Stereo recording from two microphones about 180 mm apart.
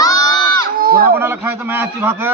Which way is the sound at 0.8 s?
55° right (ahead or behind).